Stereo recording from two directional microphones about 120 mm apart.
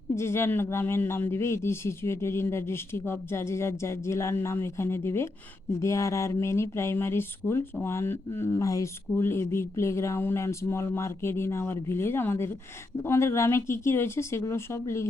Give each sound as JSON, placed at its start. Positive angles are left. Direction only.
{"t": 0.1, "sound": "speech", "side_deg": 20}